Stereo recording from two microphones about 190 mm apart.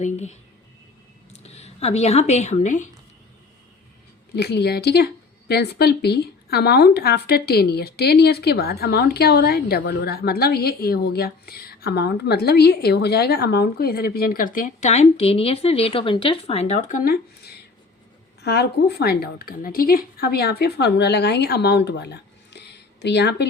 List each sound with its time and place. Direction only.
0.0 s speech: 35° left (ahead or behind)
4.4 s a woman's voice: 60° left (ahead or behind)
18.4 s a woman's voice: 60° left (ahead or behind)